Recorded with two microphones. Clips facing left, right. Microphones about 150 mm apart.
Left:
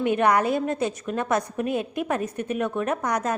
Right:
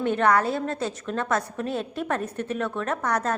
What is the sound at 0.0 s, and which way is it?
A woman's voice, 15° left (ahead or behind).